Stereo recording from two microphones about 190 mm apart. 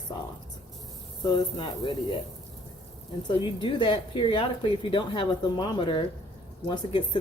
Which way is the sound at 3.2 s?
25° left (ahead or behind).